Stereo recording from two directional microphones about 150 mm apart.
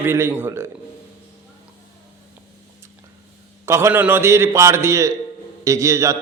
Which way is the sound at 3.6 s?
15° right (ahead or behind).